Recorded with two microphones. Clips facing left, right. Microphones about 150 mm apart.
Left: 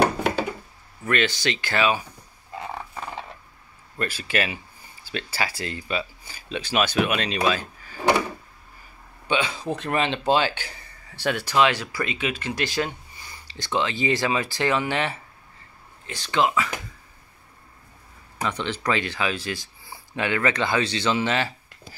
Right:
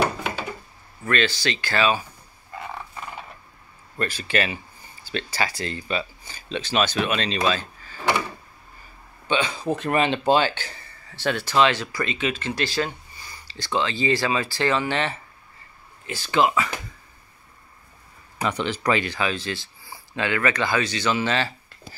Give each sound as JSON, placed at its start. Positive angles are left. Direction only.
{"t": 1.0, "sound": "speech", "side_deg": 15}
{"t": 2.6, "sound": "a sound", "side_deg": 25}
{"t": 4.0, "sound": "speech", "side_deg": 5}
{"t": 9.3, "sound": "speech", "side_deg": 5}
{"t": 10.5, "sound": "speech", "side_deg": 10}
{"t": 16.1, "sound": "speech", "side_deg": -5}
{"t": 18.4, "sound": "speech", "side_deg": -10}